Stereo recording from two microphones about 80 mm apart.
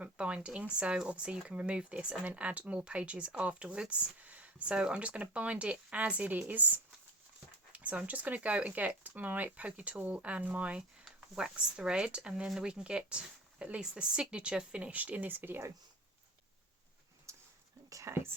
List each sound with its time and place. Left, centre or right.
0.0 s speech: centre
17.3 s a sound: right
18.1 s speech: right